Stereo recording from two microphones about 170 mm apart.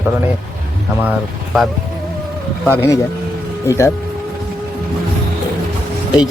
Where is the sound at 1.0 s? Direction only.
5° right (ahead or behind).